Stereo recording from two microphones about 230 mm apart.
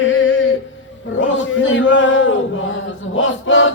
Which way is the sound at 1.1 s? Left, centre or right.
Left.